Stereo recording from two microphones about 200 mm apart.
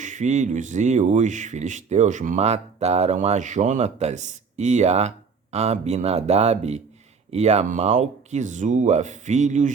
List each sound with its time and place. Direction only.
0.0 s speech: 35° right (ahead or behind)